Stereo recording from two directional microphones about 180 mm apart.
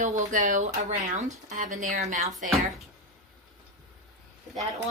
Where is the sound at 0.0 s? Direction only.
40° right (ahead or behind).